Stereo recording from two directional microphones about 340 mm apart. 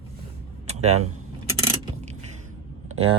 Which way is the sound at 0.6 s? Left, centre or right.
Centre.